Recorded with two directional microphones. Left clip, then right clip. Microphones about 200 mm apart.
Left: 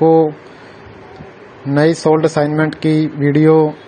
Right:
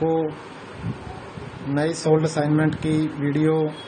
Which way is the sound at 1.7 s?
35° left (ahead or behind).